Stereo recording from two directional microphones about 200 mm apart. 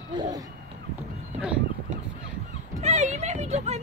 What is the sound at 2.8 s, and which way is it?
Speech, 35° right (ahead or behind).